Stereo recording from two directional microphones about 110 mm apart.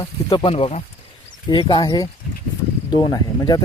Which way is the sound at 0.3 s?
55° left (ahead or behind).